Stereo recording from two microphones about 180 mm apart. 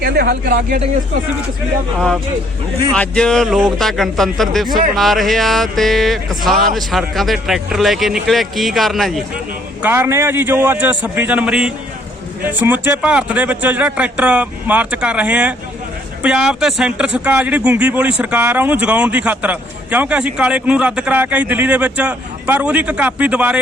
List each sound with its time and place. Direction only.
0.0 s speech: 60° right (ahead or behind)
2.9 s speech: 5° left (ahead or behind)
9.8 s speech: 10° right (ahead or behind)